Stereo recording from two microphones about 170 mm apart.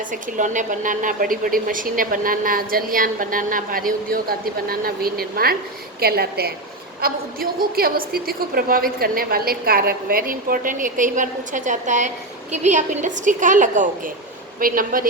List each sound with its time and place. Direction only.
0.1 s a woman's voice: 50° right (ahead or behind)